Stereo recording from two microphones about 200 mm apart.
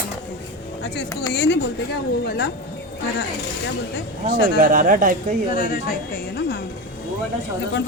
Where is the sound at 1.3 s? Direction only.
55° left (ahead or behind).